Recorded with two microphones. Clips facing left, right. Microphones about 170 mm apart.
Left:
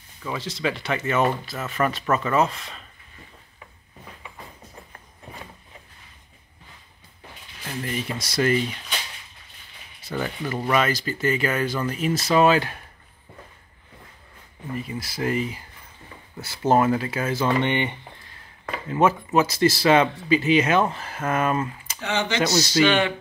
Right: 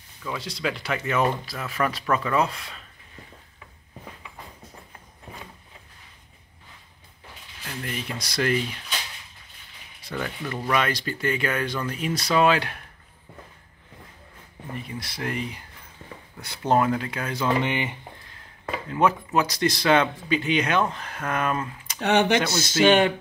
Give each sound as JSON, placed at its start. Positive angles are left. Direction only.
{"t": 0.4, "sound": "speech", "side_deg": 0}
{"t": 7.6, "sound": "speech", "side_deg": 0}
{"t": 10.0, "sound": "speech", "side_deg": 5}
{"t": 14.8, "sound": "speech", "side_deg": 5}
{"t": 22.0, "sound": "speech", "side_deg": -65}